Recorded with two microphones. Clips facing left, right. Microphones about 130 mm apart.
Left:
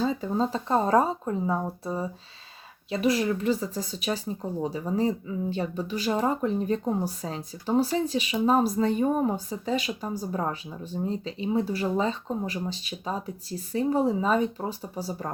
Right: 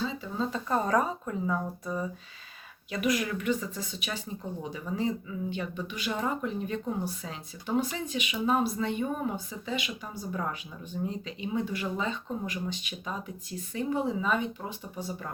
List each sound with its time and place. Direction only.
0.0 s speech: 45° left (ahead or behind)